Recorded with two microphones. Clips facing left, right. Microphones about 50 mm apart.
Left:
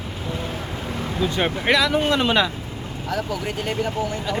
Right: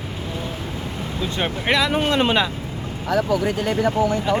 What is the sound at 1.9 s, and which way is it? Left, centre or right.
Speech, centre.